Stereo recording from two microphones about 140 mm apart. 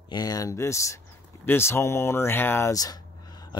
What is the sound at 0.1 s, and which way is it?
Speech, 25° left (ahead or behind).